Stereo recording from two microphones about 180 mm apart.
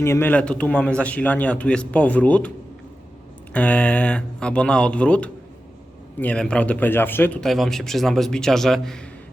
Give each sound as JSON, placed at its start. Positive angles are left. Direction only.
{"t": 0.0, "sound": "a man's voice", "side_deg": 15}
{"t": 3.5, "sound": "a man's voice", "side_deg": 5}